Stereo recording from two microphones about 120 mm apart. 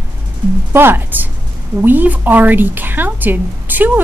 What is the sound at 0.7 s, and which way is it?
A woman's voice, 20° right (ahead or behind).